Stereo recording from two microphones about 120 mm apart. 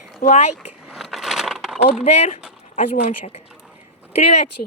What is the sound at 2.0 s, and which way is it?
Speech, 60° left (ahead or behind).